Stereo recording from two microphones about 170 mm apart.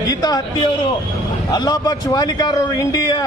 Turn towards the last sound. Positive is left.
turn(degrees=25)  # may be behind; listen again after turning